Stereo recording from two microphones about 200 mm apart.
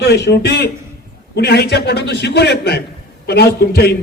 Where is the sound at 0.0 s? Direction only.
55° left (ahead or behind).